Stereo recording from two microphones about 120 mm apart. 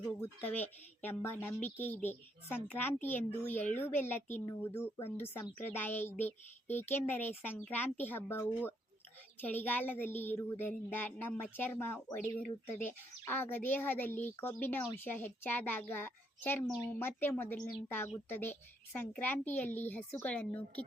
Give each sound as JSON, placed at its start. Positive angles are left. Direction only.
{"t": 0.2, "sound": "a woman's voice", "side_deg": 15}
{"t": 16.6, "sound": "a woman's voice", "side_deg": -5}
{"t": 16.9, "sound": "speech", "side_deg": 15}